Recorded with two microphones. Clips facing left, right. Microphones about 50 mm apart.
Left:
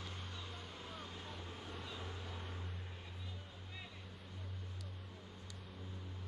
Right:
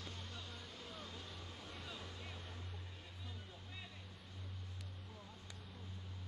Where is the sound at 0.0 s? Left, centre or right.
Left.